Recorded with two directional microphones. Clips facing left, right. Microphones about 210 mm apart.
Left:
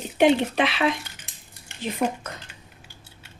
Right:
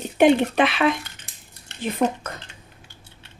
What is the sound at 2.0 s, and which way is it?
Speech, 55° right (ahead or behind).